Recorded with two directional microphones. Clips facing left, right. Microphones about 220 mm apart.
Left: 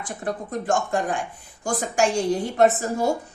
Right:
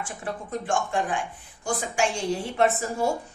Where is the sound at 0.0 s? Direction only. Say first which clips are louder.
Left 4 dB; 40° left (ahead or behind).